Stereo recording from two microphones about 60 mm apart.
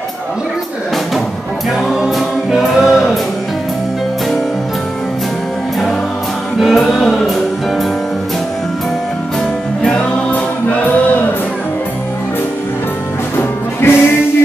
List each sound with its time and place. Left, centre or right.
1.9 s music: centre
6.6 s music: centre
13.4 s music: left